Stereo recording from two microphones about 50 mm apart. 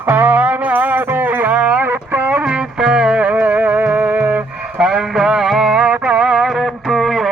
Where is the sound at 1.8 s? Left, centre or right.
Right.